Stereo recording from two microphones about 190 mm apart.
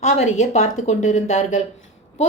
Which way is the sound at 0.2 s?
35° left (ahead or behind).